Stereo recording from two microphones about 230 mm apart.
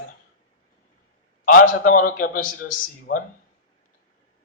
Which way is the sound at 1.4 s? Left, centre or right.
Left.